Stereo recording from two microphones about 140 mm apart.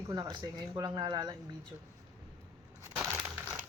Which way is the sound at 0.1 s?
30° right (ahead or behind).